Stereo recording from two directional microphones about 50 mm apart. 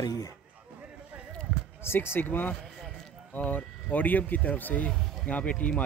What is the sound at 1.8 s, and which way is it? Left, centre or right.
Speech, left.